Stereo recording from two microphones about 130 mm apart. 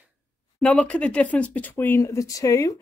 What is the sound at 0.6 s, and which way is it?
Speech, 10° left (ahead or behind).